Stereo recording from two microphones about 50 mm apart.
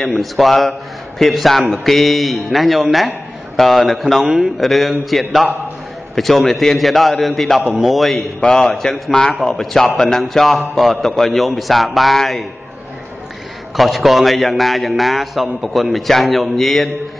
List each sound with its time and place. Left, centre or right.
0.0 s a man's voice: centre
6.1 s a man's voice: centre
8.4 s a man's voice: centre
9.1 s a man's voice: centre
9.4 s a man's voice: centre
13.7 s a man's voice: centre